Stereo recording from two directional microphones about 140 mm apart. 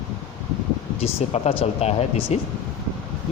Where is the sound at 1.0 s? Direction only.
45° left (ahead or behind).